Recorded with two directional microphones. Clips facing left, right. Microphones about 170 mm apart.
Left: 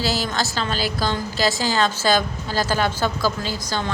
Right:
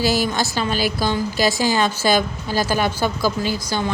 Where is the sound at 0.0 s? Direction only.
15° right (ahead or behind).